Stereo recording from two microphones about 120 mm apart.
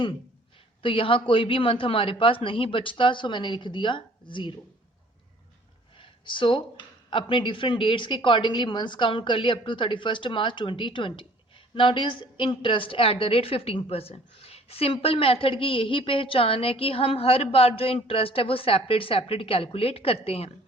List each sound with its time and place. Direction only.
0.8 s speech: 45° left (ahead or behind)
6.0 s speech: 45° left (ahead or behind)